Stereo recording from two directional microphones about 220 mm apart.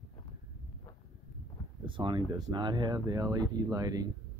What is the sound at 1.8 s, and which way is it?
Speech, 20° right (ahead or behind).